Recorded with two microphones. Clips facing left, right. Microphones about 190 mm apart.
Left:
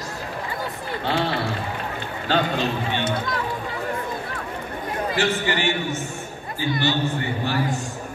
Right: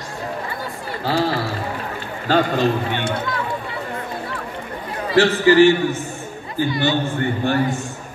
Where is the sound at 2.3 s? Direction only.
45° right (ahead or behind).